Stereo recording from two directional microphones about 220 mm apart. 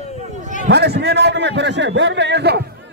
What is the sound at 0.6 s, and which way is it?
A man's voice, 45° right (ahead or behind).